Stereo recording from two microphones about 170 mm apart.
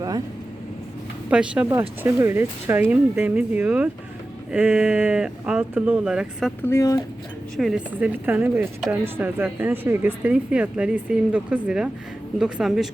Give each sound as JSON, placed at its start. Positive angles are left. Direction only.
{"t": 1.3, "sound": "a woman's voice", "side_deg": -5}
{"t": 6.6, "sound": "speech", "side_deg": 15}
{"t": 7.5, "sound": "a woman's voice", "side_deg": 0}